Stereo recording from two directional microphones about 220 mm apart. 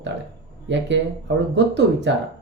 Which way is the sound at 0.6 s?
55° right (ahead or behind).